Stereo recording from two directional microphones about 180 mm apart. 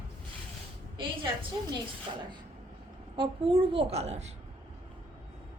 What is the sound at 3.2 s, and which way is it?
A woman's voice, 30° right (ahead or behind).